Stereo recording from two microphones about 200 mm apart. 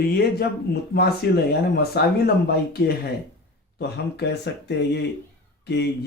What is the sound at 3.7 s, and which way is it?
Speech, 55° left (ahead or behind).